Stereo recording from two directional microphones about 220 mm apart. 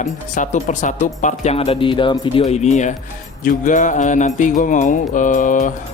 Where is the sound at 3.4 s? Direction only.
35° left (ahead or behind).